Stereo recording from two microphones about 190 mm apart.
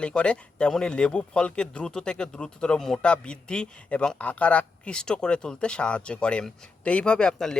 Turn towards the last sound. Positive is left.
turn(degrees=5)  # may be behind; listen again after turning